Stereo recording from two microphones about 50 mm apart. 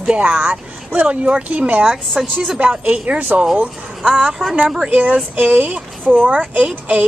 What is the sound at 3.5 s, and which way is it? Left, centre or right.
A woman's voice, centre.